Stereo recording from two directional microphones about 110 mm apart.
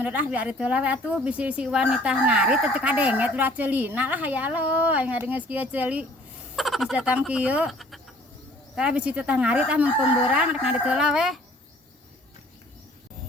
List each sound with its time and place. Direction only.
0.0 s speech: 15° right (ahead or behind)
6.6 s speech: centre (ahead or behind)
7.7 s cricket: centre (ahead or behind)
8.7 s speech: 10° right (ahead or behind)